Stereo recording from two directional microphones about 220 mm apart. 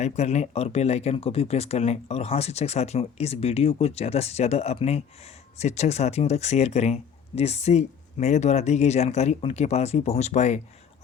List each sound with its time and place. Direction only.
0.0 s speech: 30° left (ahead or behind)